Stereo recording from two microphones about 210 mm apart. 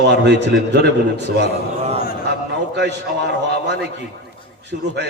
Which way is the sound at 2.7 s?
55° right (ahead or behind).